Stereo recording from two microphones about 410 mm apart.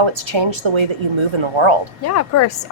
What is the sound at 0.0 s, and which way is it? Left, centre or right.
Speech, right.